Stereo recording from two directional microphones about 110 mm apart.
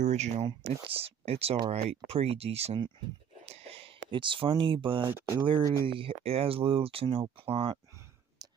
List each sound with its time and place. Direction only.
0.0 s speech: 90° right
0.7 s speech: 60° right (ahead or behind)
3.4 s a sound: 65° right (ahead or behind)
5.0 s speech: 25° right (ahead or behind)
5.9 s speech: 55° right (ahead or behind)